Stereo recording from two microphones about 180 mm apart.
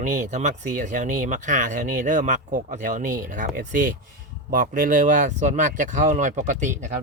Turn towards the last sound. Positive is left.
turn(degrees=-45)  # may be behind; listen again after turning